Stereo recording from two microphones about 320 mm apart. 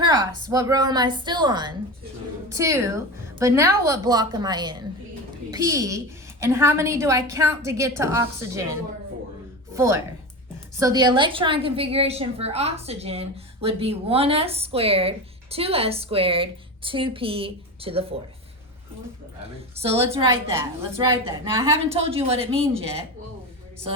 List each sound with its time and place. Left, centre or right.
0.0 s a woman's voice: centre
19.7 s a woman's voice: centre
20.1 s a woman's voice: centre